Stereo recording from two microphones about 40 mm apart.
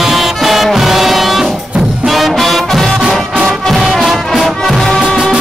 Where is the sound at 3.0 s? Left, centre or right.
Centre.